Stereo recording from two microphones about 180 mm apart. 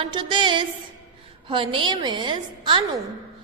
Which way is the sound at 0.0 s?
25° right (ahead or behind).